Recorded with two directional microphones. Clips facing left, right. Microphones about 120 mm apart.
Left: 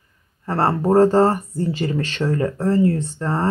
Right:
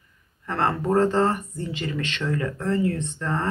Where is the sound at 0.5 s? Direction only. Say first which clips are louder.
Left 5 dB; 35° left (ahead or behind).